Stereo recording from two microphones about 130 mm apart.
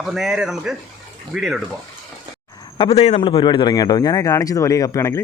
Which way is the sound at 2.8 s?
55° left (ahead or behind).